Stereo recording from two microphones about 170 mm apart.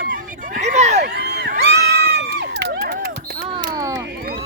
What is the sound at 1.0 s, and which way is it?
Crowd, 70° right (ahead or behind).